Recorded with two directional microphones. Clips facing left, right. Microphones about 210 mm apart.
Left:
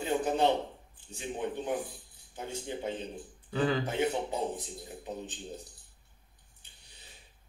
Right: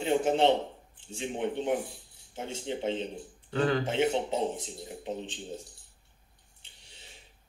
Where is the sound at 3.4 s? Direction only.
5° left (ahead or behind).